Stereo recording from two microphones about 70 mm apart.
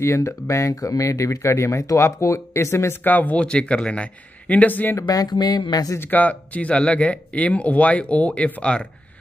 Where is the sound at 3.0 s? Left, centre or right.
Left.